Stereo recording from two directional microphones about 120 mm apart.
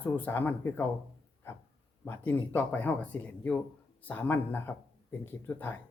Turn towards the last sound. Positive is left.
turn(degrees=15)  # may be behind; listen again after turning